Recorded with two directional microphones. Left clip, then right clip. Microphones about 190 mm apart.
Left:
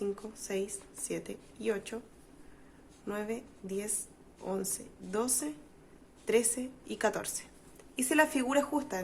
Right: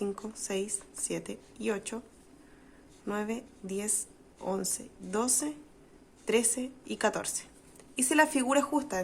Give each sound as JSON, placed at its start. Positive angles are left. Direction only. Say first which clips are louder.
{"t": 0.0, "sound": "a woman's voice", "louder": "right 1 dB", "side_deg": -25}
{"t": 3.1, "sound": "a woman's voice", "louder": "right 2 dB", "side_deg": -20}